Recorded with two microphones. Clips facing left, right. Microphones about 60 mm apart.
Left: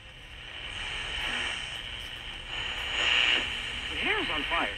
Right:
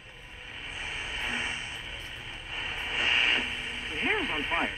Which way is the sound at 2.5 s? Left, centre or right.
Right.